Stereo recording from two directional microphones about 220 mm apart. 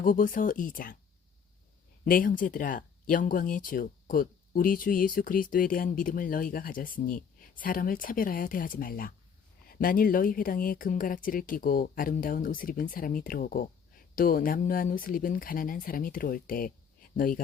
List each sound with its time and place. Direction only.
0.0 s speech: 35° left (ahead or behind)
2.0 s speech: 40° left (ahead or behind)